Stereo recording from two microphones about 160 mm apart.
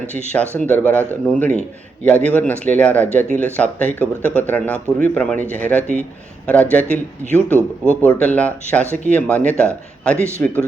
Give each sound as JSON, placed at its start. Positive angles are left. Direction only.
{"t": 0.6, "sound": "speech", "side_deg": 10}
{"t": 10.2, "sound": "speech", "side_deg": -15}
{"t": 10.4, "sound": "speech", "side_deg": 10}